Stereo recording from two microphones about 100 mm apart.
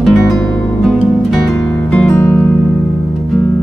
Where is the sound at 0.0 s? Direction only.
5° left (ahead or behind).